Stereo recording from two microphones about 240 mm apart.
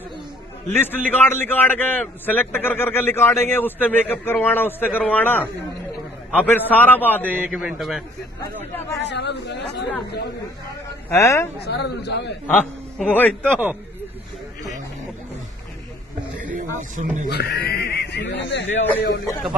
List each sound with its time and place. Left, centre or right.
0.7 s a man's voice: centre
7.3 s a man's voice: centre
8.4 s a man's voice: centre
9.0 s speech: left
11.1 s a man's voice: centre
11.6 s speech: left
12.5 s a man's voice: centre
16.3 s snake: right
16.9 s speech: right
17.3 s speech: left